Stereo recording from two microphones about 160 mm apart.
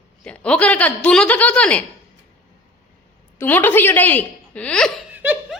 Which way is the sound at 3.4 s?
10° left (ahead or behind).